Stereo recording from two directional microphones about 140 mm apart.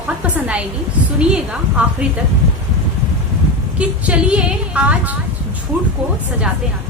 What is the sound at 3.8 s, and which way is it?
A woman's voice, 10° right (ahead or behind).